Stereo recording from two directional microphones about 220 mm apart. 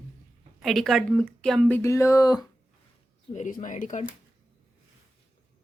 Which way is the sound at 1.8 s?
15° left (ahead or behind).